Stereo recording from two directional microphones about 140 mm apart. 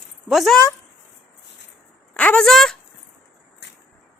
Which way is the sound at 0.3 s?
Centre (ahead or behind).